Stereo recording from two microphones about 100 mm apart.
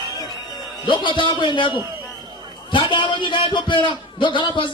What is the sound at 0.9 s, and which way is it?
Speech, 55° left (ahead or behind).